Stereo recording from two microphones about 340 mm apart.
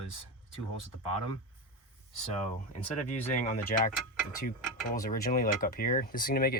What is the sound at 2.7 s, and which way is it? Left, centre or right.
Speech, left.